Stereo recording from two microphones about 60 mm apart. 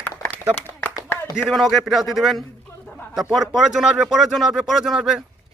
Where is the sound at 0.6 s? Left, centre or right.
Left.